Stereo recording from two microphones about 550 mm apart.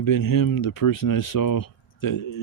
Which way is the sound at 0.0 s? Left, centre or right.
Left.